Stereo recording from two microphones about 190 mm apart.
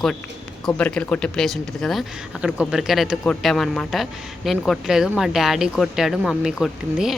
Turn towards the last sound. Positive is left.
turn(degrees=0)  # may be behind; listen again after turning